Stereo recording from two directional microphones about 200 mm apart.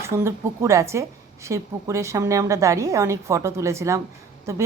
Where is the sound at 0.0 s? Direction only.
15° right (ahead or behind).